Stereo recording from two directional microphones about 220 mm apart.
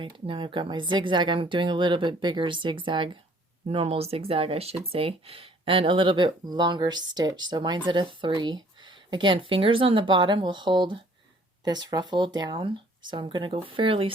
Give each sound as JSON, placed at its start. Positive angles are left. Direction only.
{"t": 0.0, "sound": "speech", "side_deg": -20}